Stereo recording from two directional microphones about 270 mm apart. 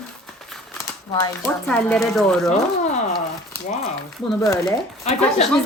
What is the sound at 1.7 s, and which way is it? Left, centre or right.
Speech, centre.